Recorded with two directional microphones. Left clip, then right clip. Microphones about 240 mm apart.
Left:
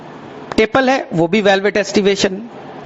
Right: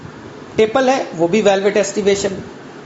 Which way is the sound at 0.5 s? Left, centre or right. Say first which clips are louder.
Even; left.